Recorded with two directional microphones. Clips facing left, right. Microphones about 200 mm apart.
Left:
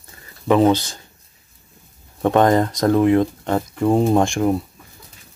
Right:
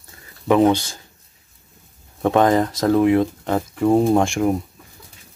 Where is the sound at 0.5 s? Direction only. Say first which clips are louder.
Even; 10° right (ahead or behind).